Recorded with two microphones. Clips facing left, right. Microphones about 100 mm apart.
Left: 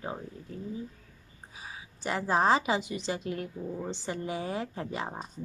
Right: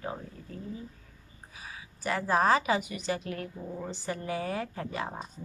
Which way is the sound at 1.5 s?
25° left (ahead or behind).